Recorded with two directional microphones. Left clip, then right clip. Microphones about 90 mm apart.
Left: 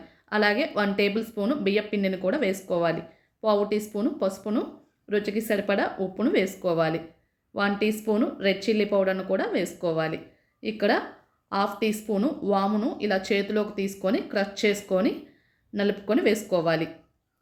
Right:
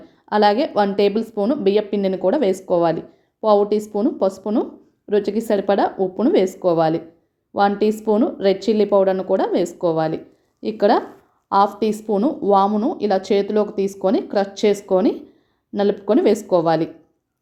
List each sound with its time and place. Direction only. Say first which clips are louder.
0.3 s a woman's voice: right 8 dB; 30° right (ahead or behind)